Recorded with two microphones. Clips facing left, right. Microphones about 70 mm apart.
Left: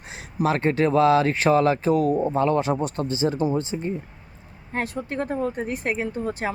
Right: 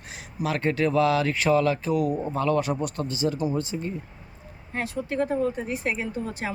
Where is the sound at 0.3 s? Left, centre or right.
Left.